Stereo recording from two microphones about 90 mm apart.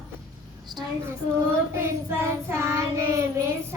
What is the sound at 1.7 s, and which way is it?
Child singing, 25° right (ahead or behind).